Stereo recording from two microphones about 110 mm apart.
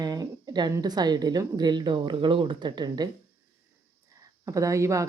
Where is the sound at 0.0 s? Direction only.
35° right (ahead or behind).